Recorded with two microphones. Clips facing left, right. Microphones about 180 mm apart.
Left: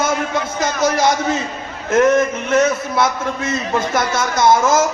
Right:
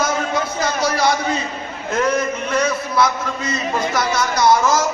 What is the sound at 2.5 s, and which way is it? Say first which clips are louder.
A man's voice: left 4 dB; 25° left (ahead or behind).